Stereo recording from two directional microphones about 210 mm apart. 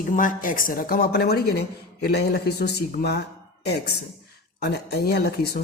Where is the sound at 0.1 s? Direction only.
40° left (ahead or behind).